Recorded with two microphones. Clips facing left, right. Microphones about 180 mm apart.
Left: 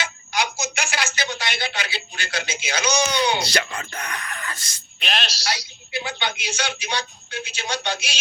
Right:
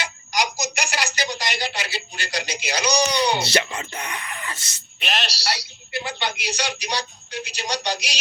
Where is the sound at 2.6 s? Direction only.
10° right (ahead or behind).